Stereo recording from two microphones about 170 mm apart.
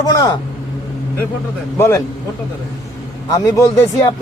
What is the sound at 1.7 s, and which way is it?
Speech, 15° left (ahead or behind).